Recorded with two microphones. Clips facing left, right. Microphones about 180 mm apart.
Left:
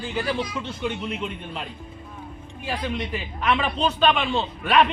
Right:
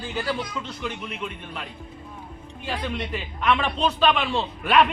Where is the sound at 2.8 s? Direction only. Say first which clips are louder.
Left 1 dB; 5° left (ahead or behind).